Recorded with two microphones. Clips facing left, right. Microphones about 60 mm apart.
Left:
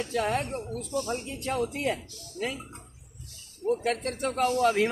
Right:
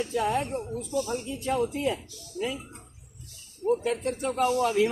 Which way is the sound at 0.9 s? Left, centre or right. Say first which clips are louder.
Right 2 dB; left.